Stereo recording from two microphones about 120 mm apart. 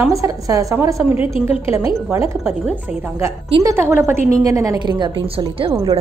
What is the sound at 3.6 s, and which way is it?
A woman's voice, 25° right (ahead or behind).